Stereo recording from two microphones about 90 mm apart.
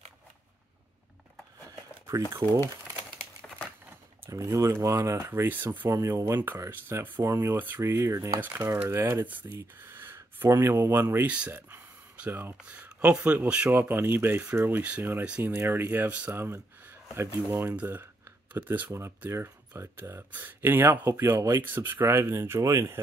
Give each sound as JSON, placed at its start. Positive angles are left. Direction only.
{"t": 4.3, "sound": "speech", "side_deg": -40}
{"t": 5.9, "sound": "speech", "side_deg": -35}
{"t": 8.4, "sound": "speech", "side_deg": -25}
{"t": 9.3, "sound": "speech", "side_deg": -20}
{"t": 11.7, "sound": "a sound", "side_deg": -25}
{"t": 12.6, "sound": "speech", "side_deg": -15}
{"t": 16.8, "sound": "a sound", "side_deg": -30}
{"t": 17.5, "sound": "speech", "side_deg": -20}
{"t": 18.9, "sound": "speech", "side_deg": -30}